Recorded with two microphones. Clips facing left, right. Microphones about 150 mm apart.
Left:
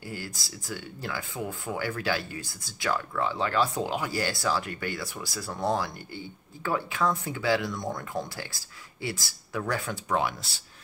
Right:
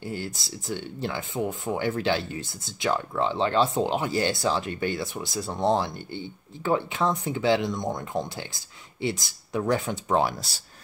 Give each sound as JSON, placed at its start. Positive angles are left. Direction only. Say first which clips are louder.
{"t": 0.0, "sound": "speech", "louder": "right 5 dB", "side_deg": -25}